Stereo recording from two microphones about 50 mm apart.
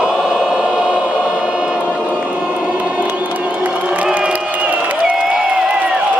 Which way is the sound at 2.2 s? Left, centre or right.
Right.